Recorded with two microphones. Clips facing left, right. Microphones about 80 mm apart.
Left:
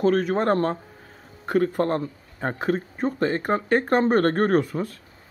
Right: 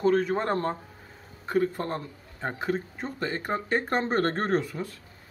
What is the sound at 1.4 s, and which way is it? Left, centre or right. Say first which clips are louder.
A man's voice: left 5 dB; left.